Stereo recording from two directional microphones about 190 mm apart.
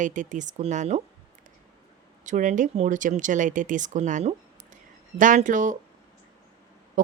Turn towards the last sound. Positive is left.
turn(degrees=-45)  # may be behind; listen again after turning